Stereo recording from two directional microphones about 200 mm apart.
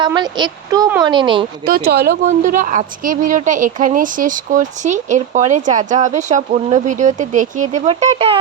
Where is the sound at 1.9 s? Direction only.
50° right (ahead or behind).